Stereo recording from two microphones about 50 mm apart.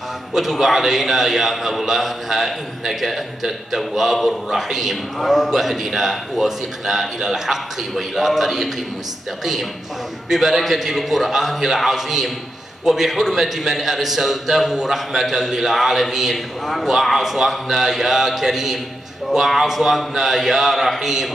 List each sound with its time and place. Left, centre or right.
0.3 s a man's voice: centre